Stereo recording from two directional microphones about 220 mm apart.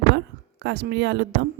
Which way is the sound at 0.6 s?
50° right (ahead or behind).